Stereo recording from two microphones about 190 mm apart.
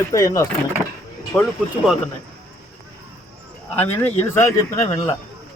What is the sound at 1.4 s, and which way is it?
Speech, centre (ahead or behind).